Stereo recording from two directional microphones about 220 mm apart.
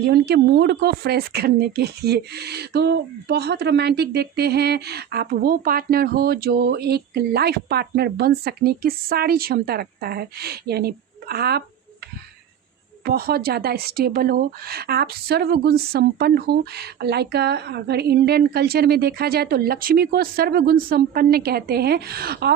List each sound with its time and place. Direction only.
0.0 s speech: 45° right (ahead or behind)
13.1 s speech: 45° right (ahead or behind)